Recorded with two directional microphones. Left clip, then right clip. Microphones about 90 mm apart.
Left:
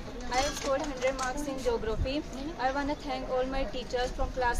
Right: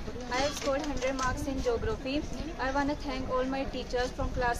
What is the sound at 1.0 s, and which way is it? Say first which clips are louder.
Speech: left 1 dB; 25° right (ahead or behind).